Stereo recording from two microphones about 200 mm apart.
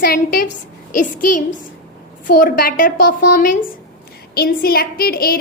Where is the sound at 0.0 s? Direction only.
45° left (ahead or behind).